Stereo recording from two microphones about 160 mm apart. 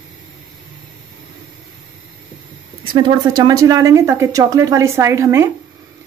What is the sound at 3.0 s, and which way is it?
Speech, 25° right (ahead or behind).